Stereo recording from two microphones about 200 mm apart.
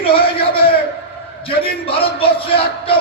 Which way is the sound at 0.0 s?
30° left (ahead or behind).